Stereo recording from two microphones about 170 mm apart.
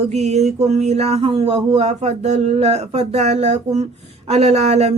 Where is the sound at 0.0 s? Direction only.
40° right (ahead or behind).